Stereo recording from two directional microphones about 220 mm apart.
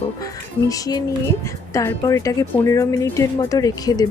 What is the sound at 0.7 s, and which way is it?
Speech, 15° left (ahead or behind).